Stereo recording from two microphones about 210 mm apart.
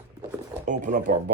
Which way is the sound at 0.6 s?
35° right (ahead or behind).